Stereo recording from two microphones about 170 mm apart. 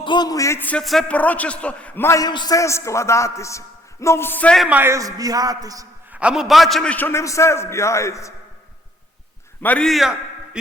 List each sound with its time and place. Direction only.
0.0 s a man's voice: 25° left (ahead or behind); by 4.7 s 5° left (ahead or behind)
4.7 s a man's voice: 15° right (ahead or behind)
6.1 s a man's voice: 5° right (ahead or behind); by 8.3 s 15° left (ahead or behind)
9.6 s a man's voice: 5° left (ahead or behind)